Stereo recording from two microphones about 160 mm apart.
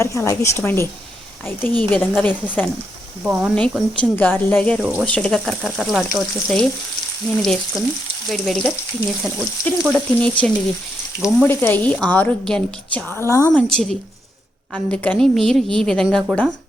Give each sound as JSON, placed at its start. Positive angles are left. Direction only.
{"t": 0.0, "sound": "a woman's voice", "side_deg": 15}
{"t": 3.2, "sound": "speech", "side_deg": -5}
{"t": 3.5, "sound": "a woman's voice", "side_deg": 10}
{"t": 4.8, "sound": "speech", "side_deg": -10}
{"t": 5.0, "sound": "a woman's voice", "side_deg": 5}
{"t": 13.6, "sound": "a woman's voice", "side_deg": 5}